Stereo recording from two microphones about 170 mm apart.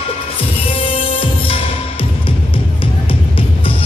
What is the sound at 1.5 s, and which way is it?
Music, 30° left (ahead or behind).